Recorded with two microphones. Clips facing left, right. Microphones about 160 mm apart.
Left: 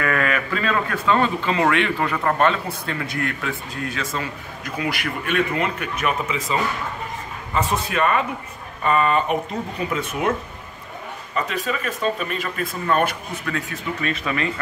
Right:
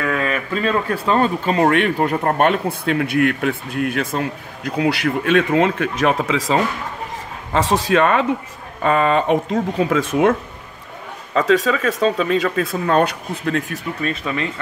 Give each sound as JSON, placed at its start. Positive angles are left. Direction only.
{"t": 0.2, "sound": "a man's voice", "side_deg": -30}
{"t": 4.7, "sound": "speech", "side_deg": -75}
{"t": 11.3, "sound": "speech", "side_deg": -90}
{"t": 14.0, "sound": "speech", "side_deg": -30}